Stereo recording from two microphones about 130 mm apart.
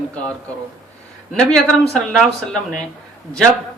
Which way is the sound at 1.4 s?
5° left (ahead or behind).